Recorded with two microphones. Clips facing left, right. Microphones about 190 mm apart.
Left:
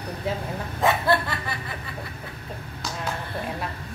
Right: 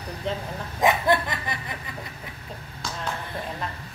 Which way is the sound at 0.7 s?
15° right (ahead or behind).